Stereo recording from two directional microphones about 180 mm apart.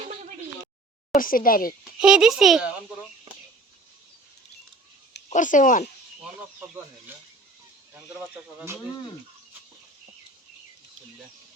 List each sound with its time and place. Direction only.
1.1 s a woman's voice: 50° left (ahead or behind)
2.0 s speech: 5° right (ahead or behind)
5.3 s a woman's voice: 45° left (ahead or behind)
7.9 s speech: 10° right (ahead or behind)